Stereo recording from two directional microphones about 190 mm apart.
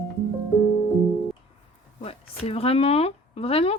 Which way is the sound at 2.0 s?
30° left (ahead or behind).